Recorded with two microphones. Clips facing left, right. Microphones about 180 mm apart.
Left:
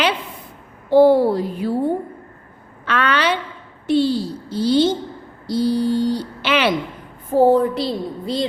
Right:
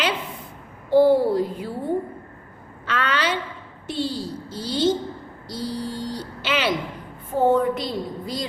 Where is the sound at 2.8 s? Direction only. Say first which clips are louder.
Left 5 dB; 65° left (ahead or behind).